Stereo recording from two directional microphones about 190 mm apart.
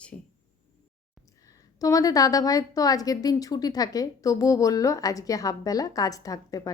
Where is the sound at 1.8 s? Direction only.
20° left (ahead or behind).